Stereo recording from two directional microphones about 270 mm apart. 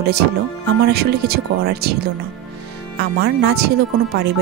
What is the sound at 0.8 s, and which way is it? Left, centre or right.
A woman's voice, right.